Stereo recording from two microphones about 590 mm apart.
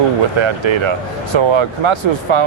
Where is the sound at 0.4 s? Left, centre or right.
Right.